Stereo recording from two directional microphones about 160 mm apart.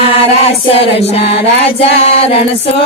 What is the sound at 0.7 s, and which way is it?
Chant, 40° left (ahead or behind).